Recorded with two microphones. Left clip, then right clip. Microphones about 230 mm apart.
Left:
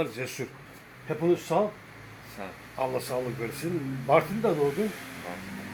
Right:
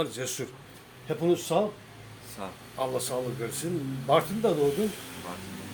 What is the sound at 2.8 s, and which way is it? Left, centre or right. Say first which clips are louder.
Speech: left 1 dB; centre.